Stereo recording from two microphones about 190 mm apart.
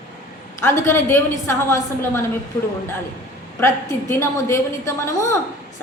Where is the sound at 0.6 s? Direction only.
15° left (ahead or behind).